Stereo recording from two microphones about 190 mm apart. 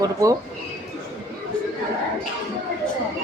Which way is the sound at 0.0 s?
15° right (ahead or behind).